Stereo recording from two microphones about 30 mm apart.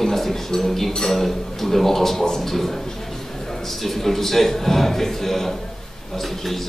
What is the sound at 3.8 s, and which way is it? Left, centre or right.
A man's voice, centre.